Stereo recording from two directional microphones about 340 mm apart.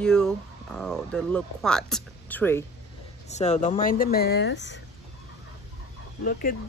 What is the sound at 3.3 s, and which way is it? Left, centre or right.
Speech, centre.